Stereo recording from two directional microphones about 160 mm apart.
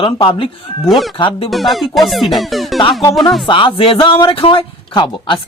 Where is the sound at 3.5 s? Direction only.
30° left (ahead or behind).